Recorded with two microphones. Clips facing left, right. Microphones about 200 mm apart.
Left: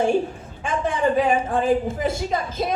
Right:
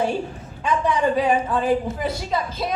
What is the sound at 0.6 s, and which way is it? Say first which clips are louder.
A woman's voice: right 1 dB; 50° left (ahead or behind).